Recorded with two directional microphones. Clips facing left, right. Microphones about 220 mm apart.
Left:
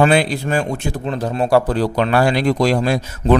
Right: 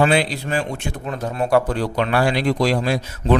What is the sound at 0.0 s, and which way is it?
Speech, 50° left (ahead or behind).